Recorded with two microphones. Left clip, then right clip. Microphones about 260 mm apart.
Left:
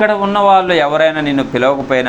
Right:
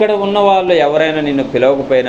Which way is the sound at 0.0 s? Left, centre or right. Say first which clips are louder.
Even; left.